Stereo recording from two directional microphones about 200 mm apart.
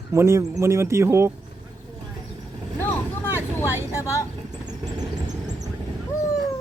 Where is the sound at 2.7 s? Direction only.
10° left (ahead or behind).